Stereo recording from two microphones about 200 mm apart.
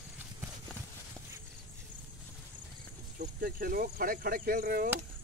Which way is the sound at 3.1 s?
45° right (ahead or behind).